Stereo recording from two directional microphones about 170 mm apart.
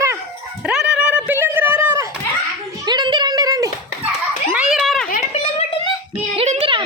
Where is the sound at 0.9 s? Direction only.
5° right (ahead or behind).